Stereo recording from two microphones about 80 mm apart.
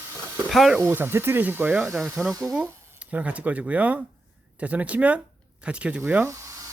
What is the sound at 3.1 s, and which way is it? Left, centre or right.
Speech, centre.